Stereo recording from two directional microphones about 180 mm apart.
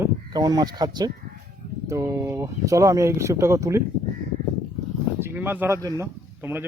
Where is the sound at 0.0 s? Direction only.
25° right (ahead or behind).